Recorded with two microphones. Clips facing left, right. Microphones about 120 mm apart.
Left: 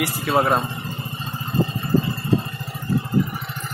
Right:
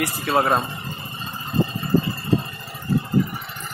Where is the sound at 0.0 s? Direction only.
Centre (ahead or behind).